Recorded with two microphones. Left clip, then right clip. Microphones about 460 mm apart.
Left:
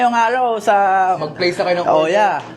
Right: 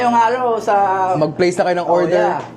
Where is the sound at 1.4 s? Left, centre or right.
Right.